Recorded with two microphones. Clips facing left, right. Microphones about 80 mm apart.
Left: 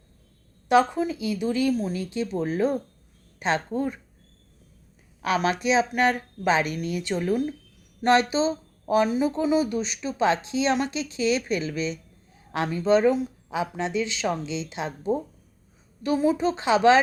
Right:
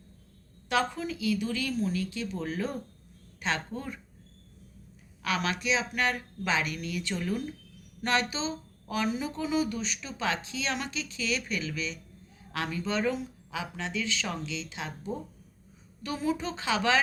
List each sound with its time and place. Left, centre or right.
0.7 s speech: left
5.2 s speech: left